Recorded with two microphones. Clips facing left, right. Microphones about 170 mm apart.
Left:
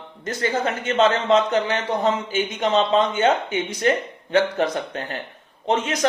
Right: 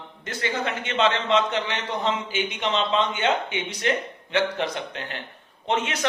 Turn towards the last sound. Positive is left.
turn(degrees=40)  # may be behind; listen again after turning